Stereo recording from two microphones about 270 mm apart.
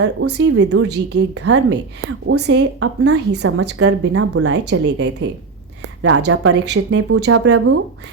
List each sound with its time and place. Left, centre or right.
0.0 s speech: right
7.3 s speech: right